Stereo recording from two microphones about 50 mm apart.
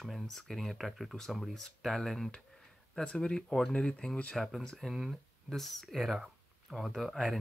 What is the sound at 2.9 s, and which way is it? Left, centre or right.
Speech, centre.